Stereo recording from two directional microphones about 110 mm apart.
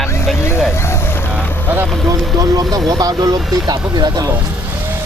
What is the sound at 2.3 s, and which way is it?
Speech, 35° right (ahead or behind).